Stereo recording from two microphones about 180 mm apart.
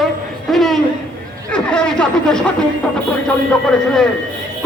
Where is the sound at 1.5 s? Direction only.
5° left (ahead or behind).